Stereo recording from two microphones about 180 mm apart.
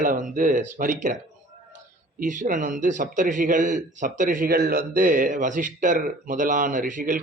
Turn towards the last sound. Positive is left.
turn(degrees=-45)  # may be behind; listen again after turning